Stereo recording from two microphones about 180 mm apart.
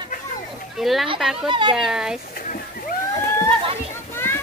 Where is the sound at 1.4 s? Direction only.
25° right (ahead or behind).